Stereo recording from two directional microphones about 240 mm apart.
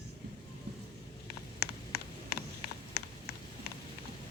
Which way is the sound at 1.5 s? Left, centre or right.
Left.